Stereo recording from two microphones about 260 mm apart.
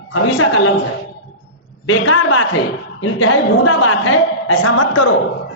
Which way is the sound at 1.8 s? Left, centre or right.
Left.